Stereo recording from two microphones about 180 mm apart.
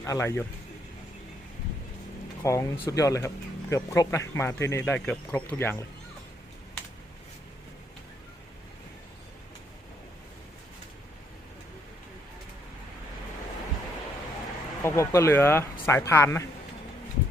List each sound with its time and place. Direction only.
0.0 s speech: 15° left (ahead or behind)
2.4 s speech: 15° left (ahead or behind)
14.8 s speech: 15° left (ahead or behind)